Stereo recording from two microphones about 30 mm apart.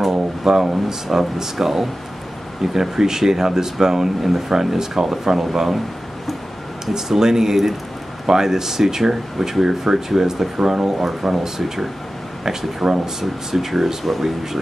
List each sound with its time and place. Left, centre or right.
0.5 s speech: centre
6.9 s speech: centre
11.0 s speech: centre
13.2 s speech: centre
14.0 s speech: centre